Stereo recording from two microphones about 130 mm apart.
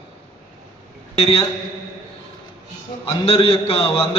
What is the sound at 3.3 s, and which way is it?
Speech, 45° left (ahead or behind).